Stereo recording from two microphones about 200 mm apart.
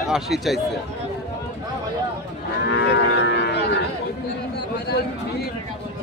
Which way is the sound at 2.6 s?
60° left (ahead or behind).